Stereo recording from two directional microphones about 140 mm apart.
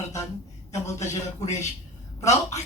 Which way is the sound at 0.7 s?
20° left (ahead or behind).